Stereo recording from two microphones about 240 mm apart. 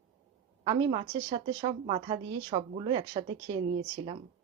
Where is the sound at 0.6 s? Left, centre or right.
Centre.